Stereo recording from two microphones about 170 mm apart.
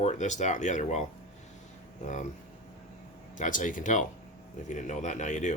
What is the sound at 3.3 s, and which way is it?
Speech, 50° left (ahead or behind).